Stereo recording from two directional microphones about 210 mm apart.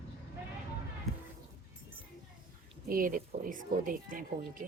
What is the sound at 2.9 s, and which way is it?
Speech, 40° right (ahead or behind).